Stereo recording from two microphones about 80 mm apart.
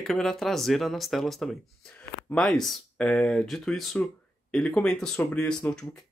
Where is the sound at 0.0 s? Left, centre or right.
Centre.